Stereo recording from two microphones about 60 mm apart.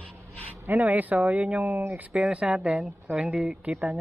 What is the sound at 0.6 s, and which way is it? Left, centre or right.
Speech, right.